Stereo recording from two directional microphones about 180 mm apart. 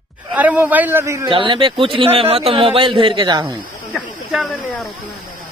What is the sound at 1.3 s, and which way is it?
A man's voice, 25° right (ahead or behind).